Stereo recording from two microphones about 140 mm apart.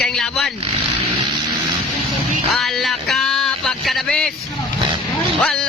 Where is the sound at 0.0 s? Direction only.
5° left (ahead or behind).